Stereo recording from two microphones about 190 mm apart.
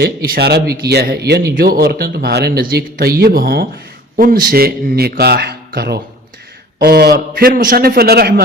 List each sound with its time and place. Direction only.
0.0 s a man's voice: 60° right (ahead or behind)